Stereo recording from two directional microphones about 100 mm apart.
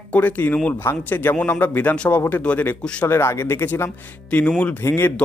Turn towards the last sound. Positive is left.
turn(degrees=20)  # may be behind; listen again after turning